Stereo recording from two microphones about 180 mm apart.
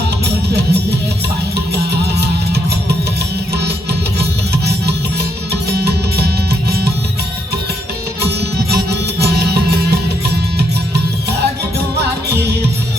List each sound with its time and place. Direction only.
0.5 s music: 65° right (ahead or behind)
4.2 s music: 65° right (ahead or behind)
8.2 s music: 65° right (ahead or behind)